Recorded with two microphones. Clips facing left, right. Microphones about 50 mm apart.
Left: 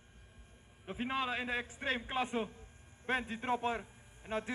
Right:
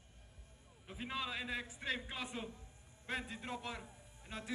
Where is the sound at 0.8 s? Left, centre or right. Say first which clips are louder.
Left 6 dB; left.